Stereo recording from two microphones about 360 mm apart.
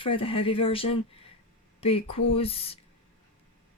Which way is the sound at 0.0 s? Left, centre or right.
Centre.